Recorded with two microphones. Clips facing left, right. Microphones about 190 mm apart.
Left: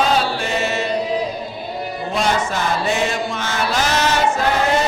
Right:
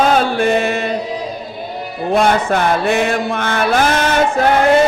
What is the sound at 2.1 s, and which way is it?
Mantra, 55° right (ahead or behind).